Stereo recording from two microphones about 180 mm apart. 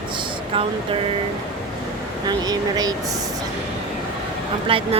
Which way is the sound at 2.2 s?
20° right (ahead or behind).